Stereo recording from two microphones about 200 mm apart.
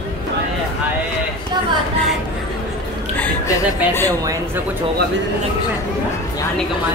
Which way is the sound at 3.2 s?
10° left (ahead or behind).